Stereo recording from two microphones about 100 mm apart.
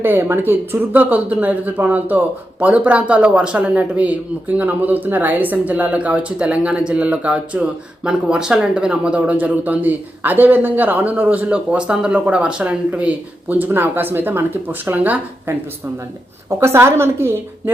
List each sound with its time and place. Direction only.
0.0 s speech: 25° right (ahead or behind)
16.5 s a woman's voice: 25° right (ahead or behind)